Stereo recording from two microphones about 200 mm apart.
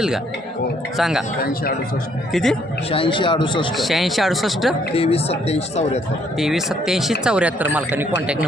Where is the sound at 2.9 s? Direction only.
25° left (ahead or behind).